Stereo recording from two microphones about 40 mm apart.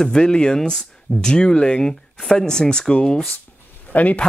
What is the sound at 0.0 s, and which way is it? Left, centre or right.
Speech, centre.